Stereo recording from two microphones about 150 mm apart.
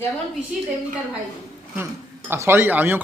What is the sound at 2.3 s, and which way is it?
Speech, 15° right (ahead or behind).